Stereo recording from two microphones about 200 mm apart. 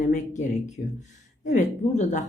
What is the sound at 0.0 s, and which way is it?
Speech, 35° left (ahead or behind).